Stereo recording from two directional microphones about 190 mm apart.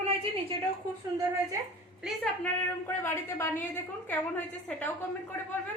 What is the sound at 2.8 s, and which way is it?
A woman's voice, 10° left (ahead or behind).